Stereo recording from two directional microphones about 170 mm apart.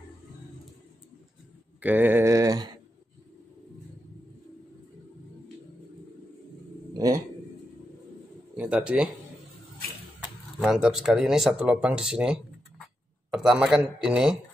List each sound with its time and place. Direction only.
1.8 s mantra: 10° right (ahead or behind)
6.9 s a sound: 20° right (ahead or behind)
8.5 s speech: 5° right (ahead or behind)
10.6 s speech: 5° right (ahead or behind)